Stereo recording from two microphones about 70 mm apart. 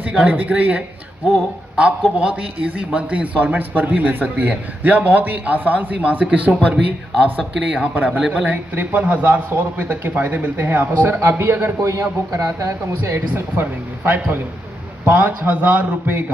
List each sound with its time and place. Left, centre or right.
0.0 s speech: centre
2.1 s speech: right
7.9 s speech: right
8.2 s speech: centre
8.5 s speech: right
11.1 s a man's voice: right
11.8 s speech: right
13.3 s speech: right